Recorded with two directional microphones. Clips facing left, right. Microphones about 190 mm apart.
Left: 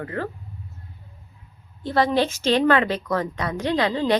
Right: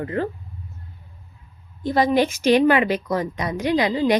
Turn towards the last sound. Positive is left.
turn(degrees=-10)  # may be behind; listen again after turning